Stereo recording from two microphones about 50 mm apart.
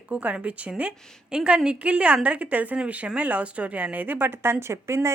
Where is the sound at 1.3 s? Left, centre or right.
Centre.